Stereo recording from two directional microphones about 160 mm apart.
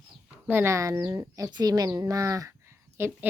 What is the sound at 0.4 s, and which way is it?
A woman's voice, 15° right (ahead or behind).